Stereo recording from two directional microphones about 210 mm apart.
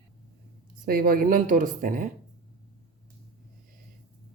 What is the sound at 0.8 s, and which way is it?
Speech, 45° right (ahead or behind).